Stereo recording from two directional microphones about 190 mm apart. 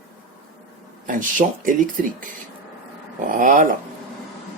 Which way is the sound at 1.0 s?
45° right (ahead or behind).